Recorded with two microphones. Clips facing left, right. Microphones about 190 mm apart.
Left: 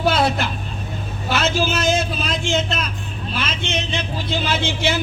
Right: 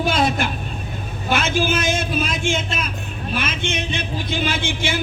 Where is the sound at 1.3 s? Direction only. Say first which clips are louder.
Even; 55° right (ahead or behind).